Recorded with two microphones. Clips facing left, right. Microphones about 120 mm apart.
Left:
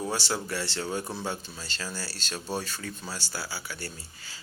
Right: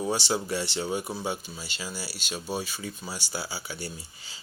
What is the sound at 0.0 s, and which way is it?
Speech, 20° right (ahead or behind).